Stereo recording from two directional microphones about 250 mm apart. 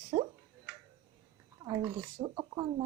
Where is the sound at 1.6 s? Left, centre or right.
Centre.